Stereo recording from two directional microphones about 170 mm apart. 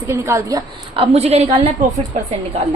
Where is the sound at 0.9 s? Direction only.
35° right (ahead or behind).